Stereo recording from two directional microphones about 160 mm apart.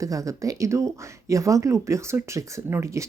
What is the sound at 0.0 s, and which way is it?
A woman's voice, 20° right (ahead or behind).